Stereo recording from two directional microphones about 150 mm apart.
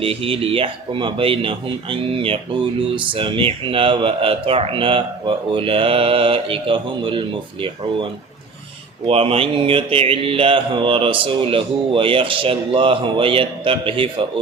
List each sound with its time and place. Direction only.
0.0 s speech: 40° right (ahead or behind)
9.0 s speech: 40° right (ahead or behind)